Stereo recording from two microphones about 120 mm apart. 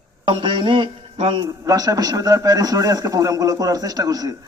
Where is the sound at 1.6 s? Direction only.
30° right (ahead or behind).